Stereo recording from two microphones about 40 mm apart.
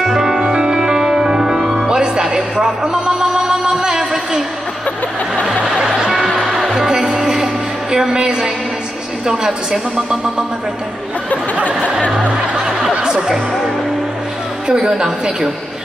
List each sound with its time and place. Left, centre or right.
0.0 s music: centre
2.2 s a sound: centre
5.8 s music: centre
7.9 s a woman's voice: centre
11.5 s speech: right
14.7 s a woman's voice: centre